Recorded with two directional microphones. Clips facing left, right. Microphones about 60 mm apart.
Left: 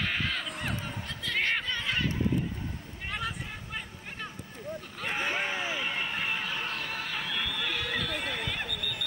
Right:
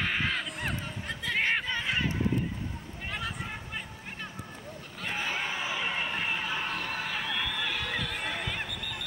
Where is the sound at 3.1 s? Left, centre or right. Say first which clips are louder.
Left 1 dB; centre.